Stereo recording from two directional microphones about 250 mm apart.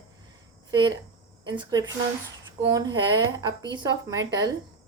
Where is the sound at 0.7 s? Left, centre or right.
Centre.